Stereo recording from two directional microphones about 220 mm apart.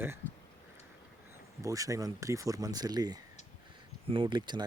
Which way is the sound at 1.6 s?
15° right (ahead or behind).